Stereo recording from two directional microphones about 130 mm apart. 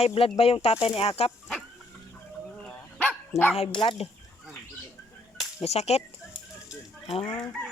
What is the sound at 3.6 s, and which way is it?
Speech, 45° left (ahead or behind).